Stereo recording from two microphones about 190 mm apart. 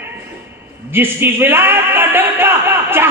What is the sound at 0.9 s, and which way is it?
A man's voice, 10° right (ahead or behind).